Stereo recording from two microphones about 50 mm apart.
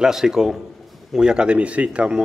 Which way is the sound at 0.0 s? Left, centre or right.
Centre.